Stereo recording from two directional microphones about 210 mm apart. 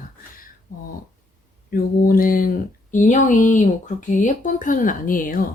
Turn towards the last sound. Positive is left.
turn(degrees=40)  # may be behind; listen again after turning